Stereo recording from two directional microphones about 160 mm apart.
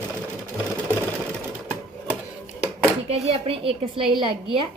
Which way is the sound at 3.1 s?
40° right (ahead or behind).